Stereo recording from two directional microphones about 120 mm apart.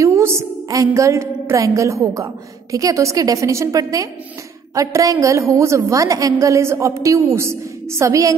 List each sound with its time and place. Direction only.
0.0 s a woman's voice: 20° right (ahead or behind)